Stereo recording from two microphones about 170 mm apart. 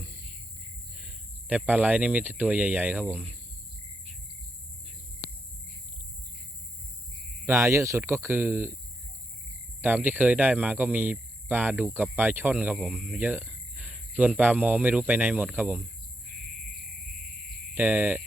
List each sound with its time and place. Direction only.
0.9 s speech: 5° right (ahead or behind)
7.4 s speech: 15° right (ahead or behind)
9.8 s speech: 10° right (ahead or behind)
13.1 s speech: 10° right (ahead or behind)
17.7 s speech: 10° right (ahead or behind)